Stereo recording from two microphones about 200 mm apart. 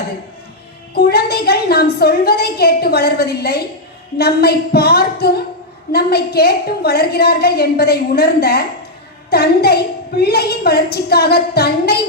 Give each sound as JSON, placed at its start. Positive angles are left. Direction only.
{"t": 0.9, "sound": "a woman's voice", "side_deg": 50}